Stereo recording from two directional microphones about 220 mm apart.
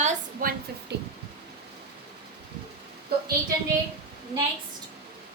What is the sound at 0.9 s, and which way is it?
Speech, 50° right (ahead or behind).